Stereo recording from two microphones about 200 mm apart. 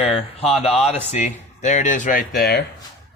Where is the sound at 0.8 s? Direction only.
Centre (ahead or behind).